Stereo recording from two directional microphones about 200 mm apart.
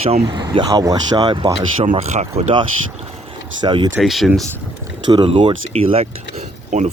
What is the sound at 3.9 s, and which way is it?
Speech, centre (ahead or behind).